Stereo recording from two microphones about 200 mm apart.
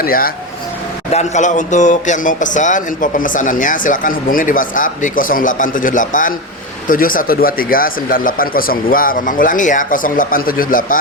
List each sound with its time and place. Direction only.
0.0 s speech: 45° left (ahead or behind)
1.1 s speech: 35° left (ahead or behind)